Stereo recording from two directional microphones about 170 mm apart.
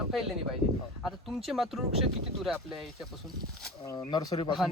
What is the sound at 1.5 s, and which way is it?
Speech, centre (ahead or behind).